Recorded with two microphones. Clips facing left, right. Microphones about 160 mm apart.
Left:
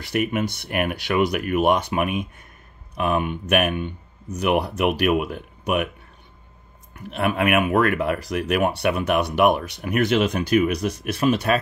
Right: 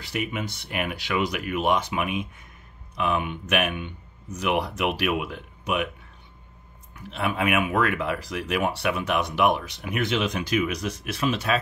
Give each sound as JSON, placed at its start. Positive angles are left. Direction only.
{"t": 0.1, "sound": "speech", "side_deg": 50}
{"t": 7.0, "sound": "speech", "side_deg": 55}